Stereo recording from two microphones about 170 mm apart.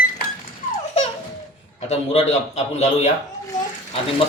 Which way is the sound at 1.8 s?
40° left (ahead or behind).